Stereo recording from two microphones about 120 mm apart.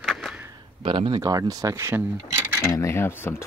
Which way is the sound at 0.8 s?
45° right (ahead or behind).